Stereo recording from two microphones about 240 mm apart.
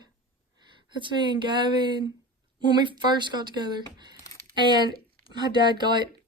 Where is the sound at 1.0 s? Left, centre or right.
Centre.